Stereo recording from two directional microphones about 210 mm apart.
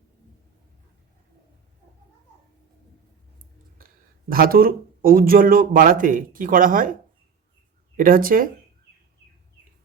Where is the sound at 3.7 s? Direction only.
45° right (ahead or behind).